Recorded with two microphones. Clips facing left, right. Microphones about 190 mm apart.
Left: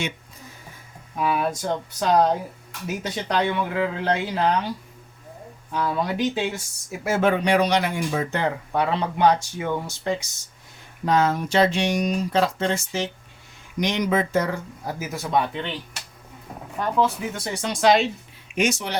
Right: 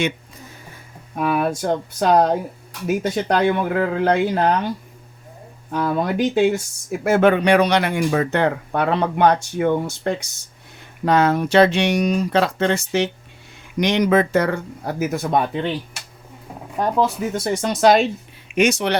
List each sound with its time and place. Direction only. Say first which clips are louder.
1.1 s speech: right 3 dB; 55° right (ahead or behind)
5.7 s speech: right 4 dB; 50° right (ahead or behind)
7.0 s speech: right 6 dB; 65° right (ahead or behind)
11.0 s speech: right 4 dB; 70° right (ahead or behind); by 15.7 s 45° right (ahead or behind)
16.7 s speech: right 3 dB; 40° right (ahead or behind)
18.4 s speech: right 6 dB; 65° right (ahead or behind)